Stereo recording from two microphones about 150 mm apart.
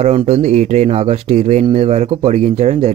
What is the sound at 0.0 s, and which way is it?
Speech, 45° right (ahead or behind).